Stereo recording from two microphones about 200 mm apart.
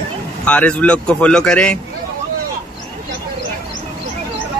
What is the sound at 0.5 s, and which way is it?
Speech, 5° left (ahead or behind).